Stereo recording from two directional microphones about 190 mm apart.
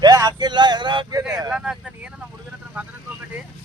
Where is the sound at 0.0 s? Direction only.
20° right (ahead or behind).